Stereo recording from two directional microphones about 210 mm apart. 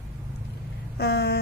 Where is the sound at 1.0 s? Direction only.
50° left (ahead or behind).